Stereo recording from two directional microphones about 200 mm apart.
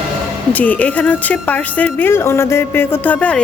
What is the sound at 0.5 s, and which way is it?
A woman's voice, 5° left (ahead or behind).